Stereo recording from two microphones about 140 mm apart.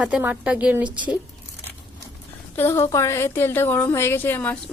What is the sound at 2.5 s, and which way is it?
A woman's voice, 15° left (ahead or behind).